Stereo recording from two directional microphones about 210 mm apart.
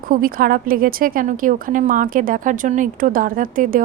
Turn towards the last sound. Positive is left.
turn(degrees=-40)  # may be behind; listen again after turning